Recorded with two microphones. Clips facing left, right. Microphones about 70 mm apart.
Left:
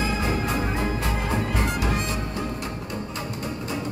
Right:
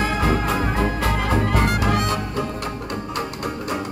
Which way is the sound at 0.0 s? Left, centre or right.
Right.